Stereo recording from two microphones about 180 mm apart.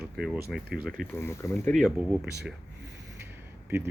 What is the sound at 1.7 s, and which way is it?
Speech, 5° right (ahead or behind).